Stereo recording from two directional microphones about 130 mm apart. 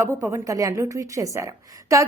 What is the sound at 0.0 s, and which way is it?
A woman's voice, 20° right (ahead or behind).